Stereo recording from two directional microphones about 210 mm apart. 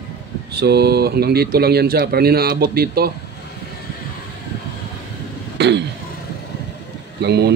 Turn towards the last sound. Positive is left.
turn(degrees=-50)  # may be behind; listen again after turning